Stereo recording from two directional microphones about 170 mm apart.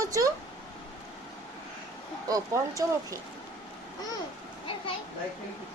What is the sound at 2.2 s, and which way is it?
Speech, 20° right (ahead or behind).